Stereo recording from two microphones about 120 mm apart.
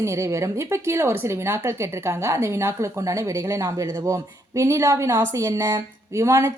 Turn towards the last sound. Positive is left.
turn(degrees=-25)  # may be behind; listen again after turning